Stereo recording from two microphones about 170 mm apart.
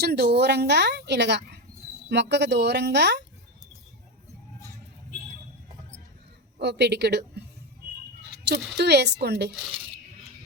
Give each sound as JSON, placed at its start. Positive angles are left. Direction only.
{"t": 0.0, "sound": "speech", "side_deg": -70}
{"t": 6.6, "sound": "speech", "side_deg": -80}
{"t": 8.4, "sound": "speech", "side_deg": -75}